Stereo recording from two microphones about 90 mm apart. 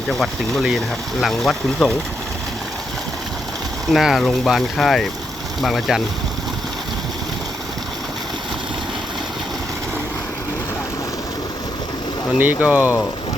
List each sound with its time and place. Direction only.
0.1 s speech: centre (ahead or behind)
3.9 s speech: centre (ahead or behind)
12.4 s speech: 20° right (ahead or behind)